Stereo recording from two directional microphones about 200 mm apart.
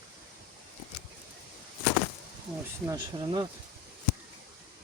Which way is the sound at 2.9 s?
20° right (ahead or behind).